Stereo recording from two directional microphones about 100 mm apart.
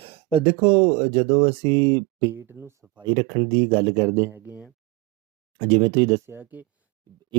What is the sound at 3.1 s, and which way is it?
Speech, 65° right (ahead or behind).